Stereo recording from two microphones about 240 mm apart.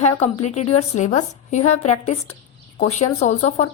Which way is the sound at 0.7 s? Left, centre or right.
Left.